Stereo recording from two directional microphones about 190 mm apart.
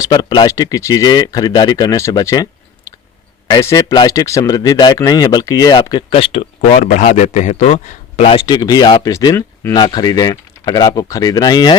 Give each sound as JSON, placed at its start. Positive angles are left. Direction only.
{"t": 0.0, "sound": "a man's voice", "side_deg": 20}